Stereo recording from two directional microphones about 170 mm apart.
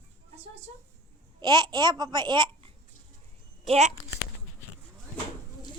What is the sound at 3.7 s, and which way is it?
Speech, 40° right (ahead or behind).